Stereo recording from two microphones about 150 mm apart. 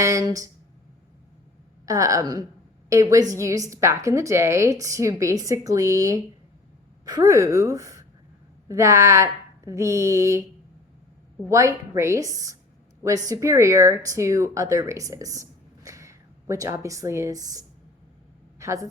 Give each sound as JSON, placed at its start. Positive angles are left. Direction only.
{"t": 0.0, "sound": "a woman's voice", "side_deg": -20}
{"t": 1.9, "sound": "a woman's voice", "side_deg": -20}
{"t": 11.4, "sound": "a woman's voice", "side_deg": -20}